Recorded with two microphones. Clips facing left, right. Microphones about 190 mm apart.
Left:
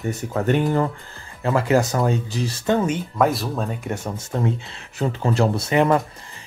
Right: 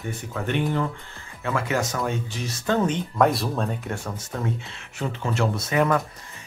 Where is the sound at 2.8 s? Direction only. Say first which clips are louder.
Left 1 dB; 5° left (ahead or behind).